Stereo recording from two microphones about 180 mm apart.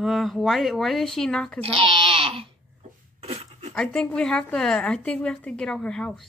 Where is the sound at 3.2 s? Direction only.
35° right (ahead or behind).